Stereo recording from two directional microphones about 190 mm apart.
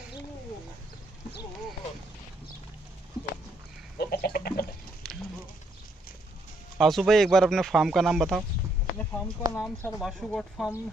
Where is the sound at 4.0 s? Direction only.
55° left (ahead or behind).